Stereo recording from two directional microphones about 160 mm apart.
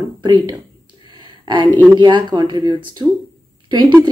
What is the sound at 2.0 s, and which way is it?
A woman's voice, 30° right (ahead or behind).